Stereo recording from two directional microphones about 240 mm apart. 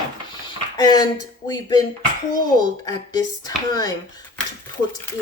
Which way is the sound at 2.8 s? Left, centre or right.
Centre.